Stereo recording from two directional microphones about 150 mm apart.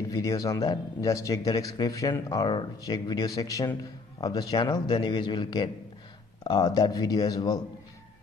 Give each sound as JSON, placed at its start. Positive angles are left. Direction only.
{"t": 0.1, "sound": "speech", "side_deg": 20}